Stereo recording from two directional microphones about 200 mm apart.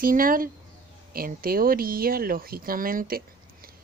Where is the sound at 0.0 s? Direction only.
45° right (ahead or behind).